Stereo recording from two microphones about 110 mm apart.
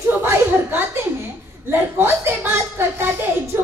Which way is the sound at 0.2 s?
15° right (ahead or behind).